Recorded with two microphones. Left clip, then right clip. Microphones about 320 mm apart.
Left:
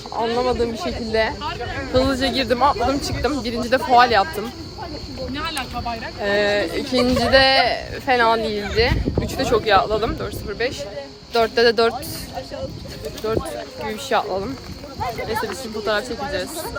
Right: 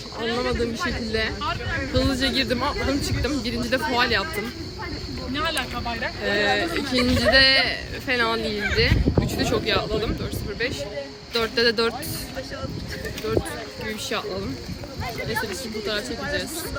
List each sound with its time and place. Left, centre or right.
0.2 s speech: centre
5.3 s snake: right
6.2 s speech: centre
13.8 s speech: centre